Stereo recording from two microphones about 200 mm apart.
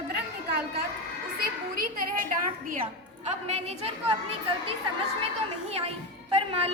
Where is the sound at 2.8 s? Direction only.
35° right (ahead or behind).